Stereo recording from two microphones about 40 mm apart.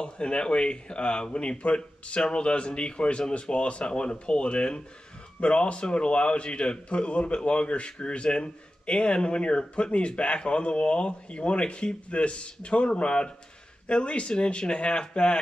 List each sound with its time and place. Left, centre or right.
0.0 s a man's voice: left